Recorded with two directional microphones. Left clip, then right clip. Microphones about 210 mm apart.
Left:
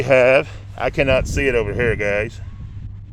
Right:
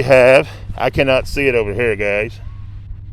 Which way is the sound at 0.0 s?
25° right (ahead or behind).